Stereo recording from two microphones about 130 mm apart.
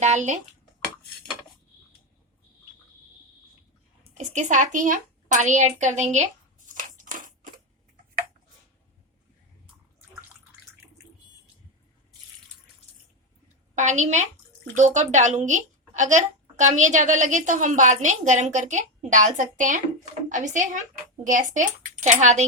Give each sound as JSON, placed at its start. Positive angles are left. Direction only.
{"t": 0.0, "sound": "a woman's voice", "side_deg": -65}
{"t": 4.1, "sound": "speech", "side_deg": -65}
{"t": 6.7, "sound": "scissors", "side_deg": -90}
{"t": 13.7, "sound": "a woman's voice", "side_deg": -65}